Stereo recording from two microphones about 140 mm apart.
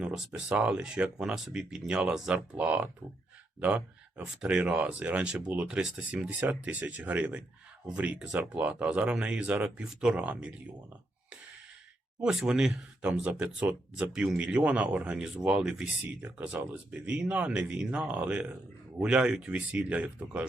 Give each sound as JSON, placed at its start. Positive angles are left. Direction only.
{"t": 0.3, "sound": "speech", "side_deg": -10}
{"t": 12.2, "sound": "speech", "side_deg": -5}